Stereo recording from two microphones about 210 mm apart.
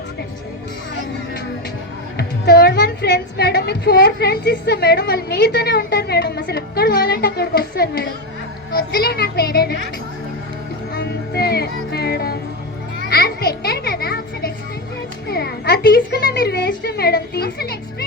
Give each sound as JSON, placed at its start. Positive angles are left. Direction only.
{"t": 2.1, "sound": "a woman's voice", "side_deg": 50}
{"t": 10.9, "sound": "music", "side_deg": 50}
{"t": 13.1, "sound": "children playing", "side_deg": 45}
{"t": 13.6, "sound": "music", "side_deg": 45}
{"t": 15.3, "sound": "a woman's voice", "side_deg": 50}